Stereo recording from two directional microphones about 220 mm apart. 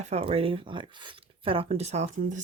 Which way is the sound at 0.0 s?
30° right (ahead or behind).